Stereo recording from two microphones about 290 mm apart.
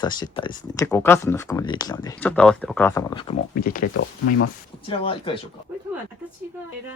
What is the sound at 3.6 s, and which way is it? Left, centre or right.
Speech, left.